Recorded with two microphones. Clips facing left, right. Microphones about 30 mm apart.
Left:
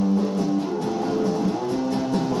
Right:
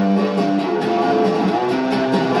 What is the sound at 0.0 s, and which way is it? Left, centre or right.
Music, right.